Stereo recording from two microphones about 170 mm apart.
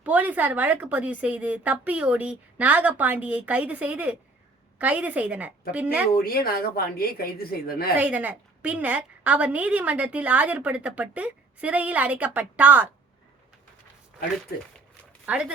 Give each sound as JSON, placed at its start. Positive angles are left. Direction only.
{"t": 0.0, "sound": "a woman's voice", "side_deg": -10}
{"t": 6.2, "sound": "a woman's voice", "side_deg": 60}
{"t": 7.9, "sound": "a woman's voice", "side_deg": -10}
{"t": 15.3, "sound": "speech", "side_deg": -5}